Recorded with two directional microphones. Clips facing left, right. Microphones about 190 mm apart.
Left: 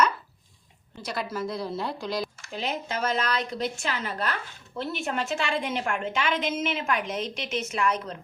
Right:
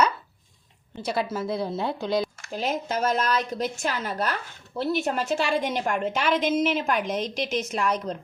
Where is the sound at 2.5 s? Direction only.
45° right (ahead or behind).